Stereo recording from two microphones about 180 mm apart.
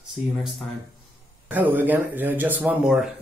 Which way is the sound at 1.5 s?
10° right (ahead or behind).